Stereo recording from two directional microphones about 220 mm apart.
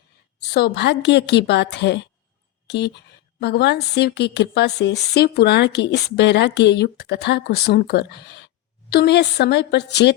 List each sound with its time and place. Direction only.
0.4 s a woman's voice: 45° left (ahead or behind)